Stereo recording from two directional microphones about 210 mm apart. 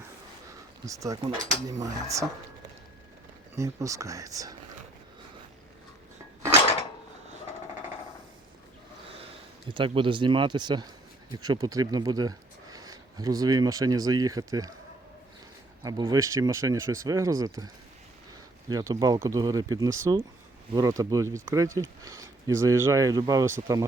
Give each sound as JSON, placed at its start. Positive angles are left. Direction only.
{"t": 0.9, "sound": "speech", "side_deg": -15}
{"t": 3.5, "sound": "speech", "side_deg": -15}
{"t": 9.6, "sound": "speech", "side_deg": -25}
{"t": 15.8, "sound": "speech", "side_deg": -20}
{"t": 18.7, "sound": "speech", "side_deg": -20}